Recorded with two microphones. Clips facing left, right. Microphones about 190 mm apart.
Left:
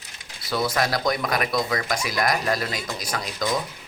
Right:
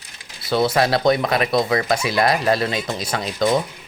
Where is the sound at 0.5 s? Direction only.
25° right (ahead or behind).